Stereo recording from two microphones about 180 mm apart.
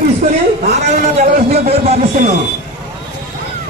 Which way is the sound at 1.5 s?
35° right (ahead or behind).